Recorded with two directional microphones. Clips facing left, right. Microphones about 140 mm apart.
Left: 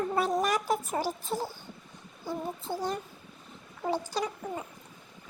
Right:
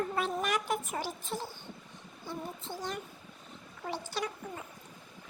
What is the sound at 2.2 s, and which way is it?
Speech, 40° left (ahead or behind).